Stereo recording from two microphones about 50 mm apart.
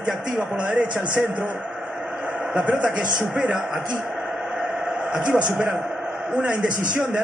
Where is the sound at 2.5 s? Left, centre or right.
Centre.